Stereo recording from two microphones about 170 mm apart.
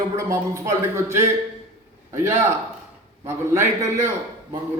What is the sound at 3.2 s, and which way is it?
Speech, 15° right (ahead or behind).